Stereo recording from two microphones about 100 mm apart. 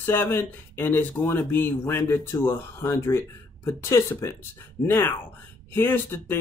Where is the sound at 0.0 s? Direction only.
25° left (ahead or behind).